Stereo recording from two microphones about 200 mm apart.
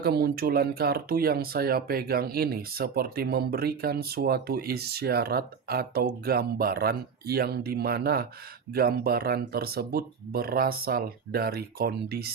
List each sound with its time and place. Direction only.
0.0 s speech: 50° right (ahead or behind)